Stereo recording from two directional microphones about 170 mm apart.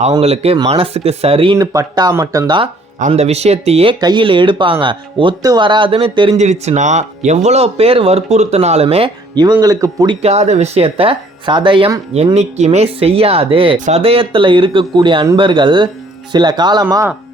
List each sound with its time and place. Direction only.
0.2 s speech: 35° right (ahead or behind)
1.5 s speech: 20° right (ahead or behind)
3.1 s speech: 40° right (ahead or behind)
6.3 s speech: 40° right (ahead or behind); by 10.2 s 20° right (ahead or behind)
10.2 s speech: 40° right (ahead or behind)
13.7 s speech: 50° right (ahead or behind)
14.0 s speech: 35° right (ahead or behind)